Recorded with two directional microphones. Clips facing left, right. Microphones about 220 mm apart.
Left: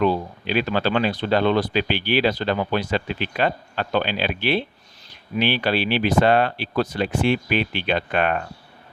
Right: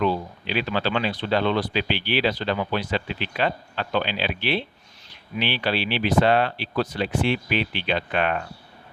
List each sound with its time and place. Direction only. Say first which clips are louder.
0.0 s speech: left 3 dB; 45° left (ahead or behind)